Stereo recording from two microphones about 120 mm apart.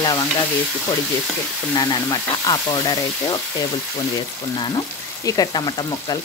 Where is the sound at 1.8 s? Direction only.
35° left (ahead or behind).